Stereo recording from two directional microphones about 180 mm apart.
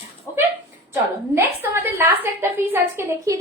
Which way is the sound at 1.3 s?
10° right (ahead or behind).